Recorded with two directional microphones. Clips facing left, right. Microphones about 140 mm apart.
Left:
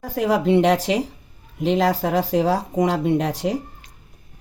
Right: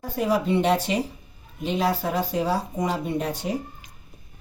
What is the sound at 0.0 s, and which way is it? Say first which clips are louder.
Speech: left 4 dB; 90° left.